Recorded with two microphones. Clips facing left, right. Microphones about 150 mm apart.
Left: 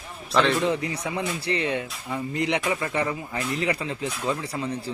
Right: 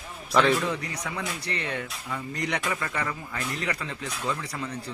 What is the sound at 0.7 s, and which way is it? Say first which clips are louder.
Speech: left 5 dB; 25° left (ahead or behind).